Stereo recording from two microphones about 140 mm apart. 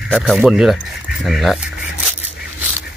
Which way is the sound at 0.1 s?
5° right (ahead or behind).